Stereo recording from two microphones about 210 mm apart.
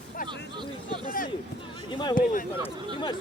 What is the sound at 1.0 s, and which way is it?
Speech, 40° left (ahead or behind).